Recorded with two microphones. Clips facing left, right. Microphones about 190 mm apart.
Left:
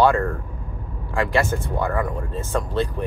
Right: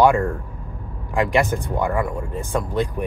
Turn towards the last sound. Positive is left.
turn(degrees=-15)  # may be behind; listen again after turning